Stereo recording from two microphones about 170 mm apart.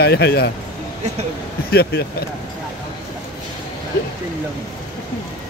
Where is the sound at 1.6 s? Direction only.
70° left (ahead or behind).